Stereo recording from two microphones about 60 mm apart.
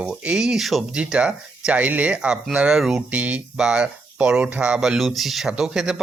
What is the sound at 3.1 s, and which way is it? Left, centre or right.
Speech, right.